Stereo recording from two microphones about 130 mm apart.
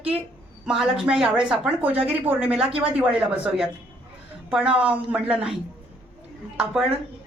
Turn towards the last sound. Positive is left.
turn(degrees=-5)  # may be behind; listen again after turning